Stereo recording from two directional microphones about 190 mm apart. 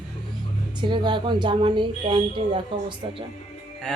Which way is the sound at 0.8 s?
25° right (ahead or behind).